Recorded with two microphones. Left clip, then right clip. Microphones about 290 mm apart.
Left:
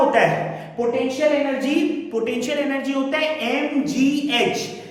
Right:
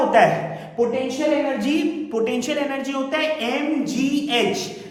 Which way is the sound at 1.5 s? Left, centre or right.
Centre.